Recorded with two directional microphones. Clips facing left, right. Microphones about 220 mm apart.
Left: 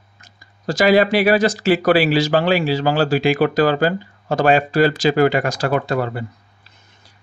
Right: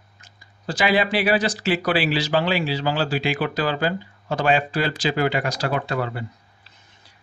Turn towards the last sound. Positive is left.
turn(degrees=45)  # may be behind; listen again after turning